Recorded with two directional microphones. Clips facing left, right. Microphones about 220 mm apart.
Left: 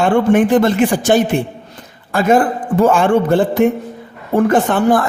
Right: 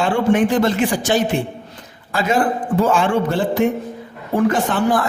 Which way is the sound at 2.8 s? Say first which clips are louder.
Left 5 dB; 55° left (ahead or behind).